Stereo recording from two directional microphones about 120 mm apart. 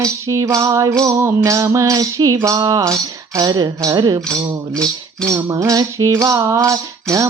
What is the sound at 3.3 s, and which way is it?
Music, 35° right (ahead or behind).